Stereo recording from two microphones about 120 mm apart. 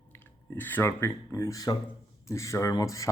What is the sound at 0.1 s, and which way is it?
Speech, 15° left (ahead or behind).